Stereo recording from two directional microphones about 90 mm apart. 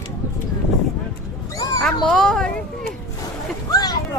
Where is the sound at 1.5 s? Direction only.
40° left (ahead or behind).